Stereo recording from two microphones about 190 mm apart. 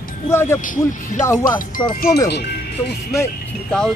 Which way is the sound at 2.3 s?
60° left (ahead or behind).